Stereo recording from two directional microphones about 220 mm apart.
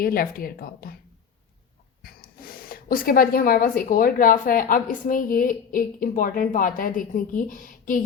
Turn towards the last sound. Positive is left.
turn(degrees=40)  # may be behind; listen again after turning